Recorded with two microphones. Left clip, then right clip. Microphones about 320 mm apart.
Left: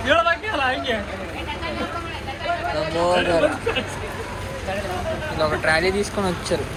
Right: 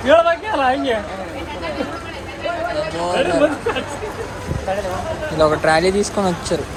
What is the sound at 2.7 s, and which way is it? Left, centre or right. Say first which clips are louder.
Speech: even; centre.